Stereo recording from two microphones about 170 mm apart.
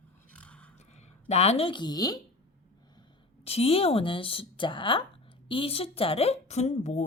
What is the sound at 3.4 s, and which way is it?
Speech, 35° left (ahead or behind).